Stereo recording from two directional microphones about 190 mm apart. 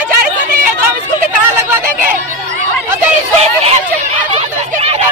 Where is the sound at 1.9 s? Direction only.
45° right (ahead or behind).